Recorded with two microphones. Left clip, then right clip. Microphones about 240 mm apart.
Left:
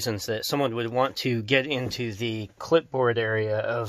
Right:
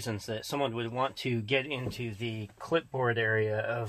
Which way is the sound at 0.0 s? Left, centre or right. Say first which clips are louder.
Left 8 dB; left.